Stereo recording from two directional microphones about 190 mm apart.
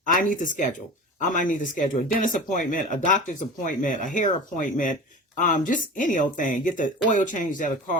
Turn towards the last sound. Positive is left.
turn(degrees=45)  # may be behind; listen again after turning